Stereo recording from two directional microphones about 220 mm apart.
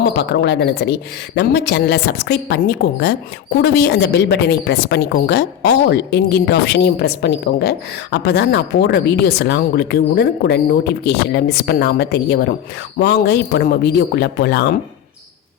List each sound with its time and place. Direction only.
0.1 s speech: 50° left (ahead or behind)